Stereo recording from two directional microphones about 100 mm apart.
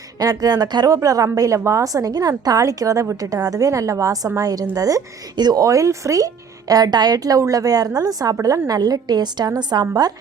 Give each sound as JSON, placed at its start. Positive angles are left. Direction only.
{"t": 0.2, "sound": "speech", "side_deg": -40}